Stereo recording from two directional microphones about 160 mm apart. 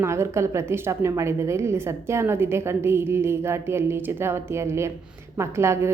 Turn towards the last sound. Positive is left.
turn(degrees=-15)  # may be behind; listen again after turning